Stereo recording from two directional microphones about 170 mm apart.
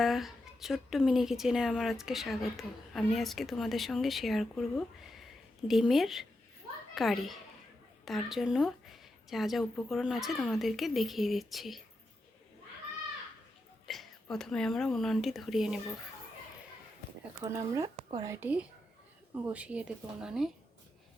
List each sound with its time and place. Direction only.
0.0 s a woman's voice: centre (ahead or behind)
13.8 s a woman's voice: centre (ahead or behind)
17.4 s speech: 15° right (ahead or behind)